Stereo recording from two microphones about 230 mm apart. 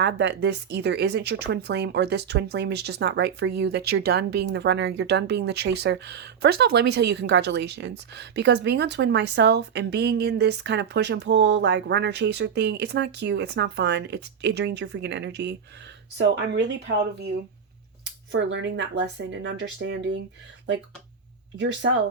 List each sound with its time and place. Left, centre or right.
0.0 s speech: right
21.6 s speech: right